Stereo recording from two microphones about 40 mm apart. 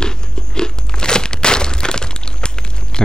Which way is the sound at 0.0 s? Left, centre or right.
Centre.